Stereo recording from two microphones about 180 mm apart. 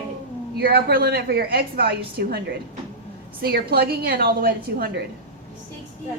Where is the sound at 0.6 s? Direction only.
60° right (ahead or behind).